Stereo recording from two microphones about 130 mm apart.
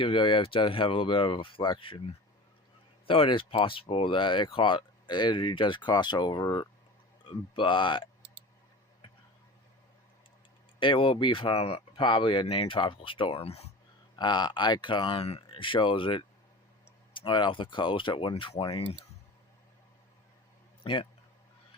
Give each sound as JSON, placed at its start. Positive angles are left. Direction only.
{"t": 0.0, "sound": "speech", "side_deg": 40}
{"t": 10.8, "sound": "speech", "side_deg": 40}
{"t": 14.2, "sound": "speech", "side_deg": 35}
{"t": 20.8, "sound": "a man's voice", "side_deg": 40}